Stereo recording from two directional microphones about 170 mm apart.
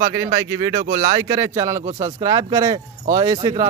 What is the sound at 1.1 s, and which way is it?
Speech, 30° right (ahead or behind).